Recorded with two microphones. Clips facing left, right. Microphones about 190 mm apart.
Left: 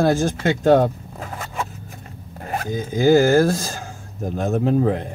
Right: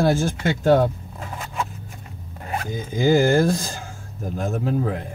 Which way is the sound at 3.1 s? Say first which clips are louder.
Left 2 dB; 15° right (ahead or behind).